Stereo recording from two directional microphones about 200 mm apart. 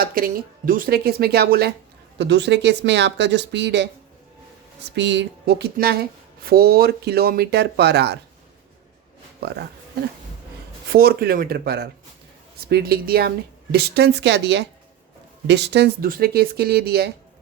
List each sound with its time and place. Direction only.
0.0 s speech: 45° right (ahead or behind)
4.9 s speech: 60° right (ahead or behind)
10.9 s speech: 50° right (ahead or behind)